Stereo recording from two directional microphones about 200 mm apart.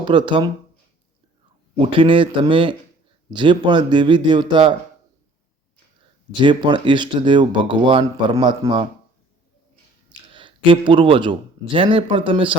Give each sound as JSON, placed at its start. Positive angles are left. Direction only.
{"t": 0.0, "sound": "speech", "side_deg": -25}
{"t": 1.8, "sound": "speech", "side_deg": -25}
{"t": 6.3, "sound": "speech", "side_deg": -20}
{"t": 10.3, "sound": "speech", "side_deg": -25}